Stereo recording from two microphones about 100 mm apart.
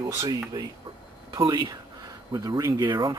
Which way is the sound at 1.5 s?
40° right (ahead or behind).